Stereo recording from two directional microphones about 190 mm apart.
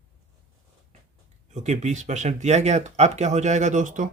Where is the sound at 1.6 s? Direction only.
40° right (ahead or behind).